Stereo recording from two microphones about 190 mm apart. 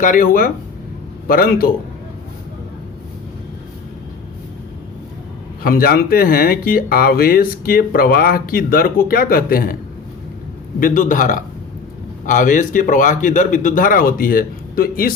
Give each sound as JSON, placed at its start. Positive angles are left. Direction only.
{"t": 0.0, "sound": "speech", "side_deg": 45}
{"t": 5.6, "sound": "speech", "side_deg": 50}
{"t": 10.8, "sound": "speech", "side_deg": 45}